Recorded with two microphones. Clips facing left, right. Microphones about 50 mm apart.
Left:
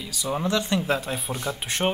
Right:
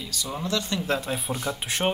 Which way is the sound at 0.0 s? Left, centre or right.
Centre.